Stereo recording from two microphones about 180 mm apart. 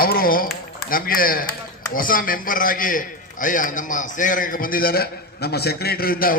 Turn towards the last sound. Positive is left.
turn(degrees=55)  # may be behind; listen again after turning